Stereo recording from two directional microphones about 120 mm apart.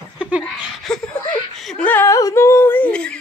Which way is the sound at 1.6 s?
5° left (ahead or behind).